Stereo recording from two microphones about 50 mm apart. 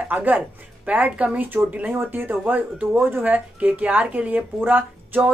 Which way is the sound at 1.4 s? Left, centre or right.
Right.